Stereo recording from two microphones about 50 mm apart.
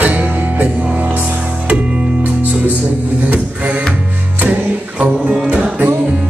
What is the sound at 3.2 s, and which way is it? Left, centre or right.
Music, right.